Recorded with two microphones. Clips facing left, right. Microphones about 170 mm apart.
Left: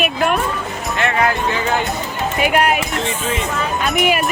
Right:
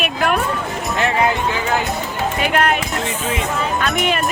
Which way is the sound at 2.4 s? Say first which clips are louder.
Left 2 dB; 10° left (ahead or behind).